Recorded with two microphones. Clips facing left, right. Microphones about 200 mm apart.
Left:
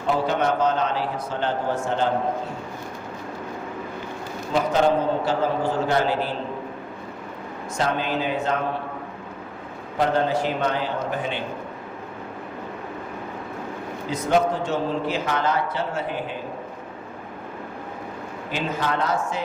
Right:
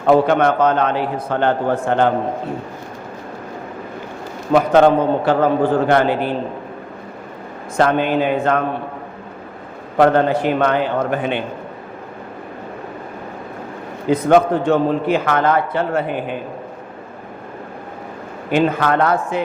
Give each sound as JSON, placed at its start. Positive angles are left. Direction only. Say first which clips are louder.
{"t": 0.0, "sound": "a man's voice", "louder": "right 9 dB", "side_deg": -60}
{"t": 4.5, "sound": "a man's voice", "louder": "right 8 dB", "side_deg": -60}
{"t": 7.8, "sound": "a man's voice", "louder": "right 9 dB", "side_deg": -60}
{"t": 10.0, "sound": "a man's voice", "louder": "right 8 dB", "side_deg": -60}
{"t": 14.1, "sound": "a man's voice", "louder": "right 8 dB", "side_deg": -55}
{"t": 18.5, "sound": "a man's voice", "louder": "right 10 dB", "side_deg": -60}